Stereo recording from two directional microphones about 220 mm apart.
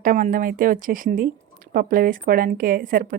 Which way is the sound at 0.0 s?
35° right (ahead or behind).